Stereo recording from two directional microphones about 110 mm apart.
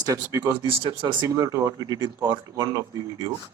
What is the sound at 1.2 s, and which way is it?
A man's voice, 30° right (ahead or behind).